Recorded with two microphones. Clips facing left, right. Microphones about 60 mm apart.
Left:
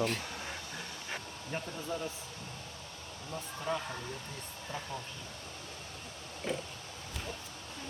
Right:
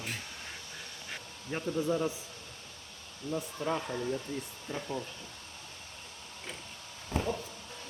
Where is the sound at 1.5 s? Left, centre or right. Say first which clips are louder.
Right 2 dB; centre.